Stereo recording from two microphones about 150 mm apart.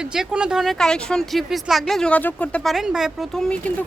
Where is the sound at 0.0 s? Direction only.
5° right (ahead or behind).